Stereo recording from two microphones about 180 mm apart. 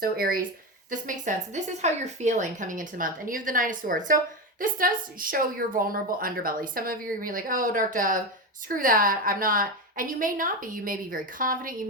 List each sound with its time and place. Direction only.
0.0 s a woman's voice: 55° right (ahead or behind)